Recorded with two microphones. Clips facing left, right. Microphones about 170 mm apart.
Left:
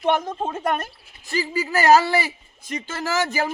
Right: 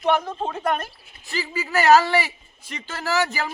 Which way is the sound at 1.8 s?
40° left (ahead or behind).